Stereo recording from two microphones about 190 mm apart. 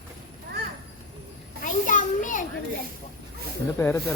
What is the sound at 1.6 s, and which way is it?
Children playing, 45° left (ahead or behind).